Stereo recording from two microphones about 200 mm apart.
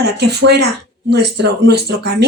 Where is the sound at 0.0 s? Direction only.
55° right (ahead or behind).